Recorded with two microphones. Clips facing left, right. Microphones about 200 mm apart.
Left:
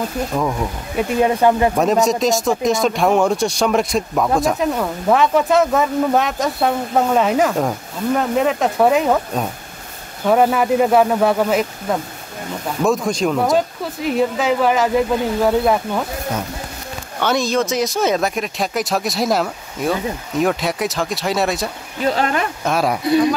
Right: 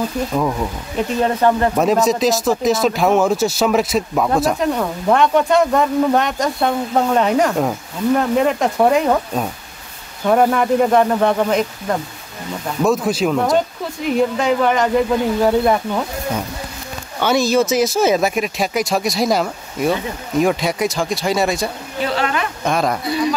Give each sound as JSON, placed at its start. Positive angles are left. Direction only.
{"t": 0.4, "sound": "speech", "side_deg": 0}
{"t": 1.2, "sound": "speech", "side_deg": 10}
{"t": 1.8, "sound": "speech", "side_deg": 0}
{"t": 17.2, "sound": "speech", "side_deg": -5}
{"t": 22.1, "sound": "speech", "side_deg": 40}
{"t": 22.7, "sound": "speech", "side_deg": 5}